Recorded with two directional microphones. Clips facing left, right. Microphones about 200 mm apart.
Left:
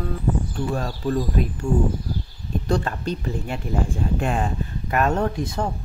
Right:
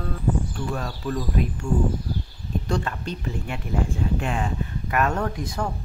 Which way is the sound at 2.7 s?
35° left (ahead or behind).